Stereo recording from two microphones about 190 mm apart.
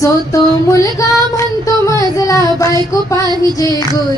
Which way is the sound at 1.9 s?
15° left (ahead or behind).